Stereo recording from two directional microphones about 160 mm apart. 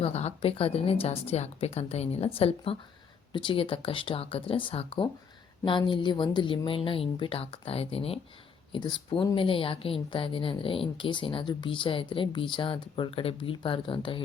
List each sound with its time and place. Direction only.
0.0 s a woman's voice: 40° left (ahead or behind)